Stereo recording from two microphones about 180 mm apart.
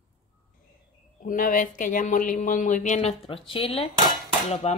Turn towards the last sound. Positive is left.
turn(degrees=40)  # may be behind; listen again after turning